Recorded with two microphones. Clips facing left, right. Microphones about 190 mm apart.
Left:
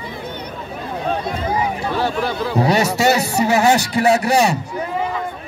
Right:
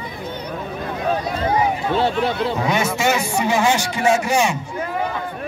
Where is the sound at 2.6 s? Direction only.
35° left (ahead or behind).